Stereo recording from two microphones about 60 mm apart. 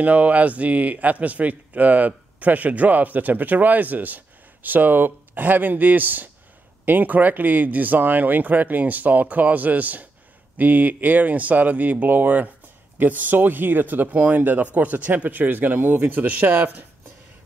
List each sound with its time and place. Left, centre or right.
0.0 s speech: right